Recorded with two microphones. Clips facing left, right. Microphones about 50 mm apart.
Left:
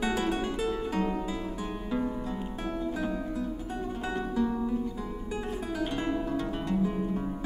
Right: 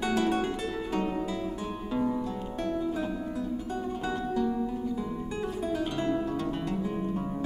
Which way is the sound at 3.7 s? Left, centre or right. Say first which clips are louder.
Right 2 dB; centre.